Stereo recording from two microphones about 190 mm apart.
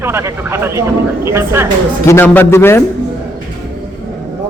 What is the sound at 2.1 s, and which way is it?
Speech, 10° left (ahead or behind).